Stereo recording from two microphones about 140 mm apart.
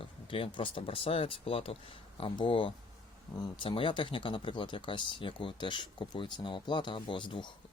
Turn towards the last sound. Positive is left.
turn(degrees=35)  # may be behind; listen again after turning